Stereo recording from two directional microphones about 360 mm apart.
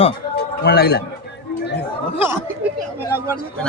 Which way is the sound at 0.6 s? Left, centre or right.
Left.